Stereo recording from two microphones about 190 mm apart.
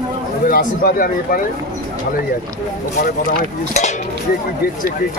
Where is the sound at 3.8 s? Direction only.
40° left (ahead or behind).